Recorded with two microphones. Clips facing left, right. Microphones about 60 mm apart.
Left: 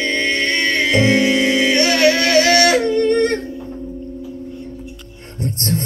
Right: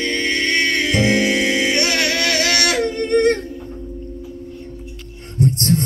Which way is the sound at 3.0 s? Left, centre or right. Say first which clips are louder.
Right 2 dB; right.